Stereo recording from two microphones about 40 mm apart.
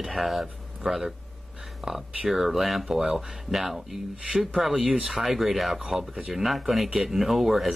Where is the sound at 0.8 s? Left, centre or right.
Centre.